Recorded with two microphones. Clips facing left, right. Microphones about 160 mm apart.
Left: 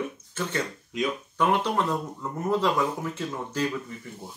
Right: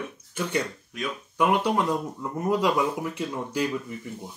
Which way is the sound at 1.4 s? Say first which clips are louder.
Right 2 dB; 10° right (ahead or behind).